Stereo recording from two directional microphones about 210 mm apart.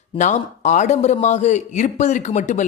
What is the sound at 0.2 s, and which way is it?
Speech, 35° left (ahead or behind).